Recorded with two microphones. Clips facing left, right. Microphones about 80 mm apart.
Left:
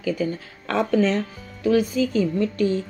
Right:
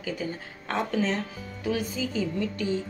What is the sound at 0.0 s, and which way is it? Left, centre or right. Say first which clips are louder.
Speech: left 8 dB; left.